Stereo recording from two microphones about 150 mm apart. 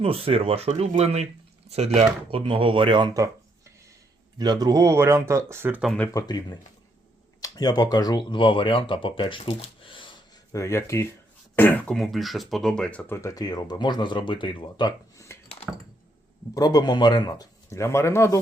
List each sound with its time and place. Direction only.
0.0 s speech: 40° right (ahead or behind)
4.4 s speech: 25° right (ahead or behind)
6.1 s speech: 25° left (ahead or behind)
9.5 s a sound: 40° left (ahead or behind)
10.5 s speech: 20° left (ahead or behind)
11.9 s speech: centre (ahead or behind)
13.2 s speech: 25° left (ahead or behind)
16.6 s speech: 25° left (ahead or behind)